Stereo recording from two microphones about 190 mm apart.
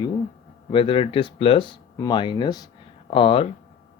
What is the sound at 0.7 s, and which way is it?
Speech, 30° left (ahead or behind).